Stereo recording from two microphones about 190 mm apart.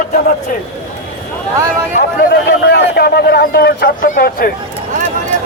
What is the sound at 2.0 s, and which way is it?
Speech, 55° left (ahead or behind).